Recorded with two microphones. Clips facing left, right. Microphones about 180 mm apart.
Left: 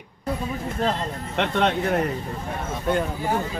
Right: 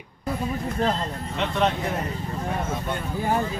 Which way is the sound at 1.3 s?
65° left (ahead or behind).